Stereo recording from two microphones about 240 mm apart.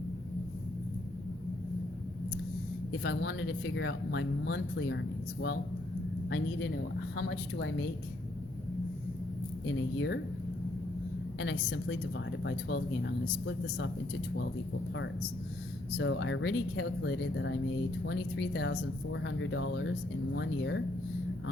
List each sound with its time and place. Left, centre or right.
3.0 s speech: left
9.6 s speech: left
11.3 s speech: left
16.0 s speech: left